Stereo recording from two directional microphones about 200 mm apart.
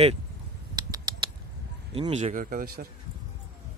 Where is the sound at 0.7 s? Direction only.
20° right (ahead or behind).